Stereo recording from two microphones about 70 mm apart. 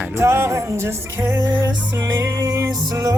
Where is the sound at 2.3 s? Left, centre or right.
Right.